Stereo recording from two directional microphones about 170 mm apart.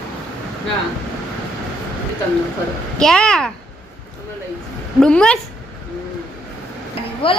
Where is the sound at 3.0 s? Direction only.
5° left (ahead or behind).